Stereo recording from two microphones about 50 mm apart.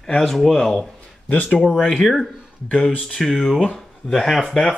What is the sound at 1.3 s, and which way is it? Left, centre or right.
Speech, left.